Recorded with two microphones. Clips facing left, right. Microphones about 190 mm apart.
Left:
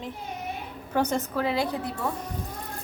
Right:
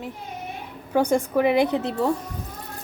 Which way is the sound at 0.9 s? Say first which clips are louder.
Right 6 dB; 10° right (ahead or behind).